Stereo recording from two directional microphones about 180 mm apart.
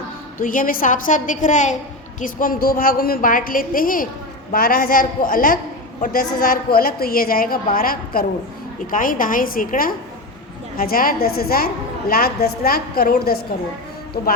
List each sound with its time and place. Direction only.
0.3 s a woman's voice: 50° left (ahead or behind)